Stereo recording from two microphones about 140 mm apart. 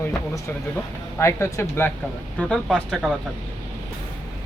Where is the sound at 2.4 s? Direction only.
5° left (ahead or behind).